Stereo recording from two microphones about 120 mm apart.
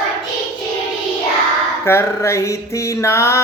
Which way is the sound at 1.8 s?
20° left (ahead or behind).